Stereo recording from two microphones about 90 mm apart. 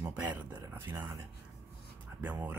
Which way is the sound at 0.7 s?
25° right (ahead or behind).